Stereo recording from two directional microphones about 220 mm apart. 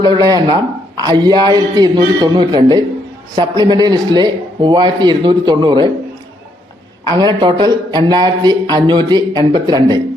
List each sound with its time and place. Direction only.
0.0 s a man's voice: 20° right (ahead or behind)
7.0 s a man's voice: 20° right (ahead or behind)